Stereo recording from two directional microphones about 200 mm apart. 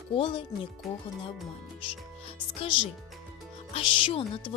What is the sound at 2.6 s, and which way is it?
Speech, 25° left (ahead or behind).